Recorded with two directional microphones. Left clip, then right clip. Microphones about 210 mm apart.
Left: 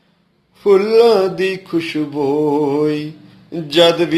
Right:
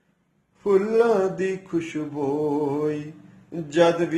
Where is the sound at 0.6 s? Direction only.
30° left (ahead or behind).